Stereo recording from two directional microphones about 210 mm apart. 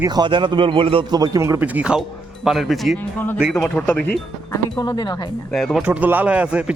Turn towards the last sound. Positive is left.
turn(degrees=-5)  # may be behind; listen again after turning